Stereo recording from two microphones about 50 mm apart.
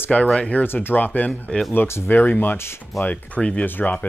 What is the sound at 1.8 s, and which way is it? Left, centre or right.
Speech, left.